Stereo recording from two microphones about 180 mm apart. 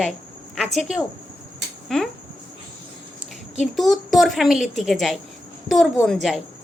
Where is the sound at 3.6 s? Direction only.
Centre (ahead or behind).